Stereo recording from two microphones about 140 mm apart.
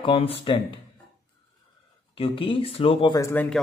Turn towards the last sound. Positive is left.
turn(degrees=15)  # may be behind; listen again after turning